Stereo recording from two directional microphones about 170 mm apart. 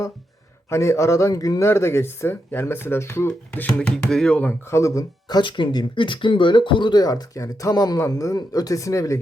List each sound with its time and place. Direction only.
0.7 s speech: 15° left (ahead or behind)